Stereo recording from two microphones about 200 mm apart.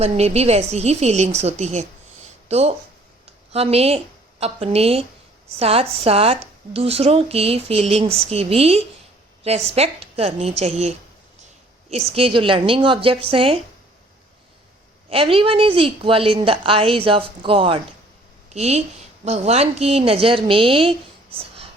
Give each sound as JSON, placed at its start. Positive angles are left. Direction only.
{"t": 0.0, "sound": "a woman's voice", "side_deg": -30}
{"t": 12.1, "sound": "speech", "side_deg": -25}
{"t": 15.1, "sound": "a woman's voice", "side_deg": -30}
{"t": 21.3, "sound": "a sound", "side_deg": -30}